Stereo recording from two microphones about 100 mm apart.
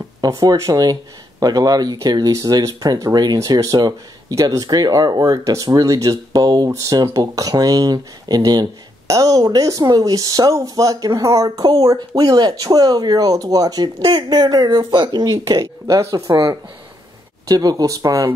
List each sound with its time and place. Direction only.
0.2 s speech: 40° right (ahead or behind); by 15.1 s 55° right (ahead or behind)
15.4 s speech: 40° right (ahead or behind)
17.5 s speech: 40° right (ahead or behind)